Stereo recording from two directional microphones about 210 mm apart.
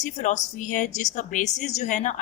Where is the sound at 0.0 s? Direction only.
35° left (ahead or behind).